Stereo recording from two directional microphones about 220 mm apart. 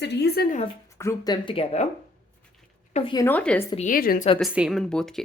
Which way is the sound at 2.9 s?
20° left (ahead or behind).